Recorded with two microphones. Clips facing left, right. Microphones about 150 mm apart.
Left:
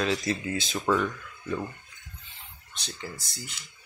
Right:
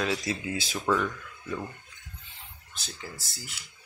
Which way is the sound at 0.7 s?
10° left (ahead or behind).